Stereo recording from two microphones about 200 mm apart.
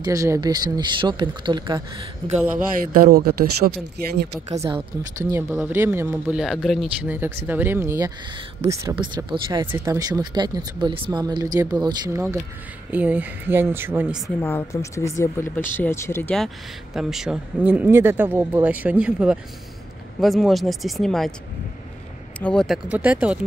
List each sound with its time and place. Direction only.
0.0 s speech: 15° right (ahead or behind)
2.8 s speech: 45° right (ahead or behind)
4.5 s speech: 30° right (ahead or behind)
5.3 s speech: 10° right (ahead or behind)
14.4 s speech: 15° left (ahead or behind)
22.4 s speech: 5° left (ahead or behind)
22.8 s speech: 5° right (ahead or behind)